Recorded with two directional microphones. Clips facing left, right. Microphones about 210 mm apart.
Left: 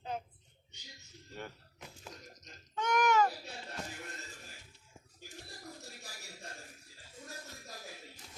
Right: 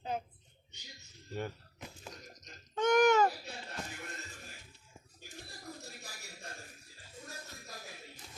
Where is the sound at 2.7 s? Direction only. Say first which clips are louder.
Right 4 dB; 30° right (ahead or behind).